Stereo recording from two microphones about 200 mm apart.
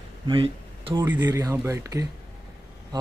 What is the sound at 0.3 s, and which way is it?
Speech, 25° right (ahead or behind).